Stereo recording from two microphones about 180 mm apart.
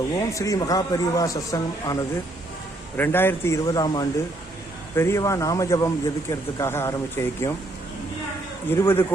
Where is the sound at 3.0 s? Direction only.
10° left (ahead or behind).